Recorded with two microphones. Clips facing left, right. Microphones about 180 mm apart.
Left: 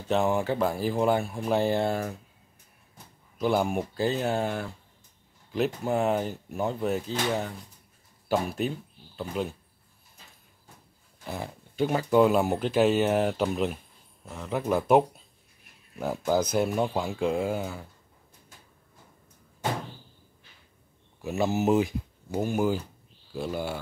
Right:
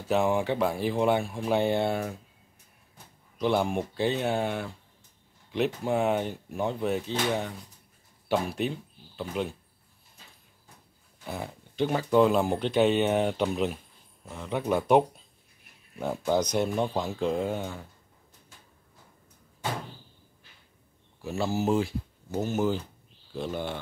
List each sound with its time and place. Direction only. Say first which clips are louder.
0.1 s speech: even; centre (ahead or behind)
3.3 s speech: even; 5° left (ahead or behind)
11.2 s speech: even; centre (ahead or behind)
21.2 s speech: left 2 dB; 20° left (ahead or behind)